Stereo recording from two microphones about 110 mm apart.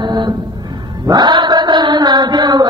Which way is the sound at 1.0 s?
40° right (ahead or behind).